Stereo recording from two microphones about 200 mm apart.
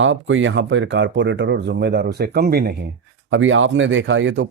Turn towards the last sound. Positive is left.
turn(degrees=-70)  # may be behind; listen again after turning